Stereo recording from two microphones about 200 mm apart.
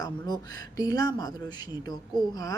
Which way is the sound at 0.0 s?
20° left (ahead or behind).